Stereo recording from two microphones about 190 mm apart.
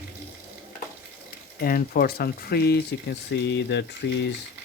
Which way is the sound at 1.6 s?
50° left (ahead or behind).